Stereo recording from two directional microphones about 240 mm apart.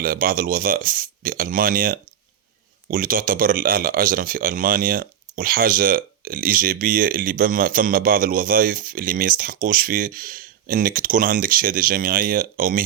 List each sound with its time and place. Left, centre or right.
0.0 s speech: right